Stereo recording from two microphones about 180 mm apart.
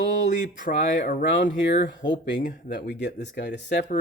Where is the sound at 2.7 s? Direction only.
70° left (ahead or behind).